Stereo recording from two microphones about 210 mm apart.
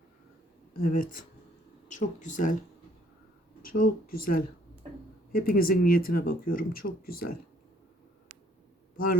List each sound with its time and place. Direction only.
0.8 s speech: 40° left (ahead or behind)
3.6 s speech: 40° left (ahead or behind)